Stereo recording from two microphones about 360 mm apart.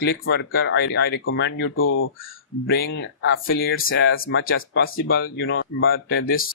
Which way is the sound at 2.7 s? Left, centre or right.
Left.